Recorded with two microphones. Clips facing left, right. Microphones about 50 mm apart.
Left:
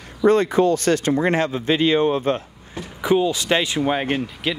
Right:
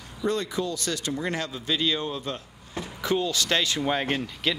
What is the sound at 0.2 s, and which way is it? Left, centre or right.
Speech, left.